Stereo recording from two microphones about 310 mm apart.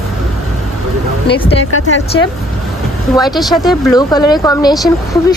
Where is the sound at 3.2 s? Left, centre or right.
Centre.